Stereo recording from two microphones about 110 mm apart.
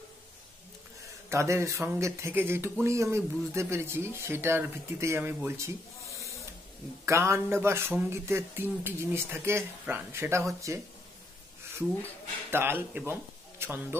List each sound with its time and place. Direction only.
1.3 s speech: 25° right (ahead or behind)
7.1 s speech: 25° right (ahead or behind)
12.4 s speech: 20° right (ahead or behind)